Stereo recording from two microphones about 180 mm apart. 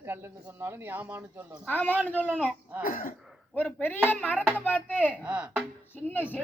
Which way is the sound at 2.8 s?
50° left (ahead or behind).